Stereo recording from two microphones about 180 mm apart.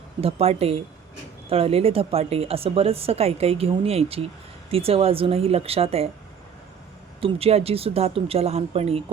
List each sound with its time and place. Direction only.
0.2 s speech: 35° right (ahead or behind)
7.2 s speech: 30° right (ahead or behind)